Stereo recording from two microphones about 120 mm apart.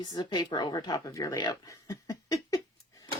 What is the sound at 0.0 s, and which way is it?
A woman's voice, 35° left (ahead or behind).